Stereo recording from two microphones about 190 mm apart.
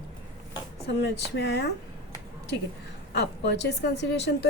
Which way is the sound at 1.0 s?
60° left (ahead or behind).